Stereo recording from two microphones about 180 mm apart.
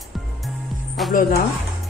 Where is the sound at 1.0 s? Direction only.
Centre (ahead or behind).